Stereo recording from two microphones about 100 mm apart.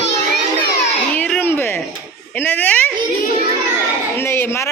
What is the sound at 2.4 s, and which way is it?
Speech, 20° left (ahead or behind).